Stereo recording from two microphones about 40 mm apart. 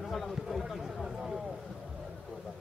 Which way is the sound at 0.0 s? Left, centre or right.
Centre.